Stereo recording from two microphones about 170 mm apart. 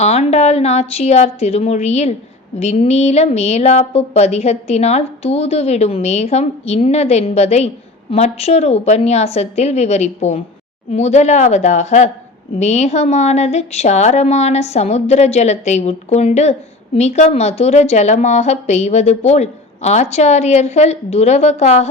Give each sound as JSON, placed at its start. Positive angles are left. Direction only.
{"t": 0.0, "sound": "a woman's voice", "side_deg": 40}